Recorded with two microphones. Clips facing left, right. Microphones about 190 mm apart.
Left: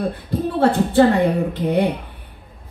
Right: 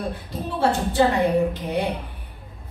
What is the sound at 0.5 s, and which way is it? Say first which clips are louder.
Speech: left 5 dB; 55° left (ahead or behind).